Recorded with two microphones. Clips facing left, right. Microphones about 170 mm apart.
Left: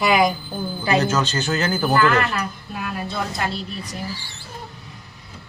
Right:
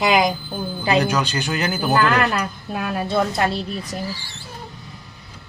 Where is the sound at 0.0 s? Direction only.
20° right (ahead or behind).